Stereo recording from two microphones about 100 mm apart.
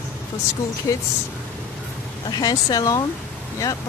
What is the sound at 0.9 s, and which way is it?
Speech, 30° left (ahead or behind).